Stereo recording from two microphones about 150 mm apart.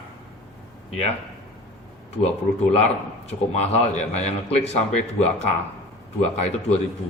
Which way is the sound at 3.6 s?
50° left (ahead or behind).